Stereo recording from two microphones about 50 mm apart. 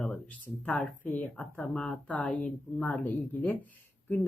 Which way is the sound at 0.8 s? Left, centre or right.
Left.